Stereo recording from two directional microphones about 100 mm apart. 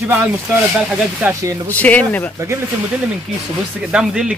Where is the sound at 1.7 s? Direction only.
15° left (ahead or behind).